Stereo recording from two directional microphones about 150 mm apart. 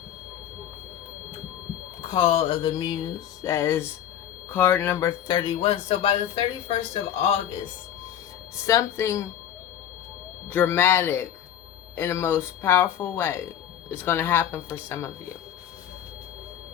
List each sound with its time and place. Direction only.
2.0 s music: 35° left (ahead or behind); by 3.9 s 15° left (ahead or behind)
4.5 s speech: 10° left (ahead or behind)
5.3 s music: 35° left (ahead or behind)
8.6 s speech: 20° left (ahead or behind)
10.5 s speech: 10° left (ahead or behind)